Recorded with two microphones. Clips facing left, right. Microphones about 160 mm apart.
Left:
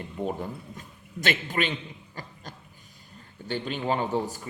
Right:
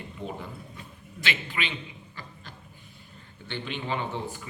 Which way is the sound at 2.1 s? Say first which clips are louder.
Left 6 dB; 40° left (ahead or behind).